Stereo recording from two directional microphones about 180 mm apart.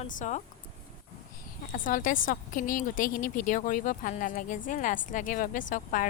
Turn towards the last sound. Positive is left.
turn(degrees=45)  # may be behind; listen again after turning